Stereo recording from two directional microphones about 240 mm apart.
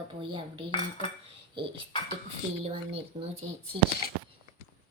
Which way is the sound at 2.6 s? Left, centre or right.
Right.